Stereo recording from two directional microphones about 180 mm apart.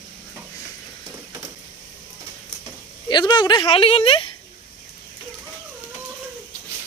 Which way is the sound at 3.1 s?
25° left (ahead or behind).